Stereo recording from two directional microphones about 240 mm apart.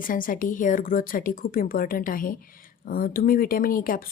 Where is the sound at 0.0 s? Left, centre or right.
Left.